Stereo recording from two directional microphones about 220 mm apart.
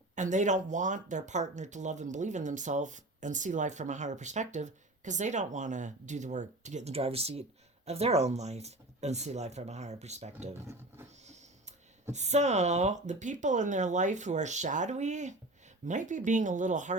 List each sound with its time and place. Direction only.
0.2 s speech: 35° right (ahead or behind)
12.1 s speech: 30° right (ahead or behind)